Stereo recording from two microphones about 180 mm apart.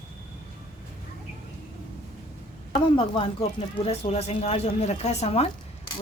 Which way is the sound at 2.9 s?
30° left (ahead or behind).